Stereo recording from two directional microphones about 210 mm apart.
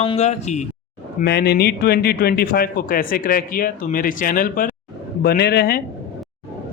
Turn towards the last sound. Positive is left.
turn(degrees=45)  # may be behind; listen again after turning